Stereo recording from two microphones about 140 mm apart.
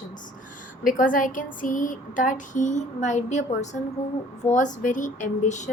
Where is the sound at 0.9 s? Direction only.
75° left (ahead or behind).